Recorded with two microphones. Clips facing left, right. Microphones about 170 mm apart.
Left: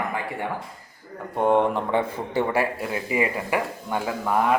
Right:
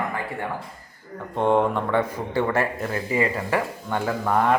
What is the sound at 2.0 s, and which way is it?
Speech, 25° left (ahead or behind).